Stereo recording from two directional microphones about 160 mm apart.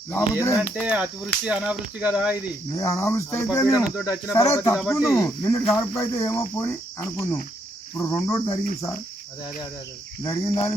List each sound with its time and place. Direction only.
0.3 s speech: 20° left (ahead or behind)
0.7 s speech: 5° right (ahead or behind)
2.7 s speech: 20° left (ahead or behind)
3.8 s speech: 5° right (ahead or behind)
4.3 s speech: 20° left (ahead or behind)
4.7 s speech: centre (ahead or behind)
5.1 s speech: 20° left (ahead or behind)
10.2 s speech: 20° left (ahead or behind)